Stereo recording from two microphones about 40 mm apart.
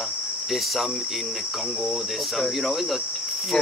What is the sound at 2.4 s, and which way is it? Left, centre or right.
Cricket, centre.